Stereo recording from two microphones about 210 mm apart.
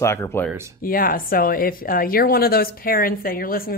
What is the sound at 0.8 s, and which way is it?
Speech, 45° left (ahead or behind).